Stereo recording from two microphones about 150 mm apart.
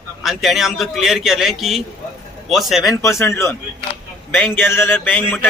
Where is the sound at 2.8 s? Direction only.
20° left (ahead or behind).